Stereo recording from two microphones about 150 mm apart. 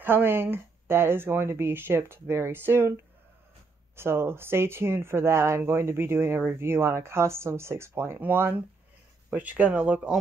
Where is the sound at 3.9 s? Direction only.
15° right (ahead or behind).